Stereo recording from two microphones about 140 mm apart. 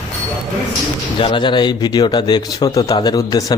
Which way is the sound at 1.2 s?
35° left (ahead or behind).